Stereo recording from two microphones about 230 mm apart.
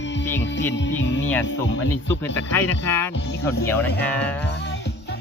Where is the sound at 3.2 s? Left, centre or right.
Left.